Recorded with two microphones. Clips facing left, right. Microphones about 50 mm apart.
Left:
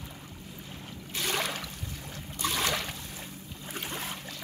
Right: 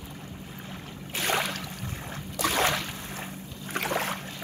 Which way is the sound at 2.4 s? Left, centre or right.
Right.